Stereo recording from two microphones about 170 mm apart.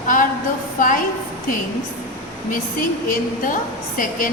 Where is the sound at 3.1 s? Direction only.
55° left (ahead or behind).